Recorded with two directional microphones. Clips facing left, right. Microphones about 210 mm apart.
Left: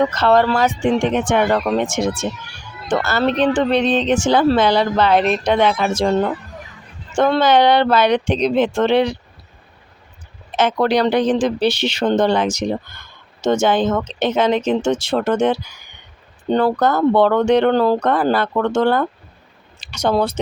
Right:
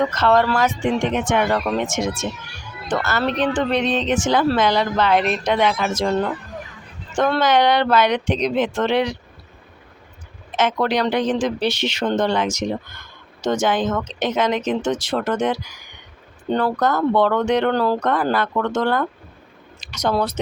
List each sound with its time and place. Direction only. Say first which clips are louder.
0.1 s speech: left 2 dB; 30° left (ahead or behind)
10.6 s speech: left 4 dB; 35° left (ahead or behind)